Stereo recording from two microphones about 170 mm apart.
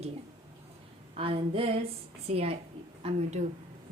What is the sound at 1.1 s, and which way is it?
Speech, 35° right (ahead or behind).